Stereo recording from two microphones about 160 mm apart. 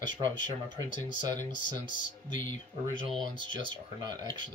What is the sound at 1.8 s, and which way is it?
Speech, 55° left (ahead or behind).